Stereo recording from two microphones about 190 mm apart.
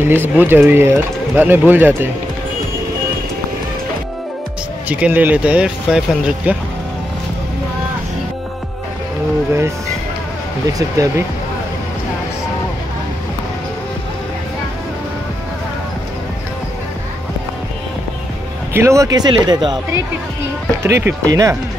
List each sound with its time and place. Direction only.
0.0 s speech: 10° right (ahead or behind)
4.8 s speech: 10° right (ahead or behind)
10.7 s speech: 15° right (ahead or behind)
18.7 s speech: 15° right (ahead or behind)
20.8 s speech: 15° right (ahead or behind)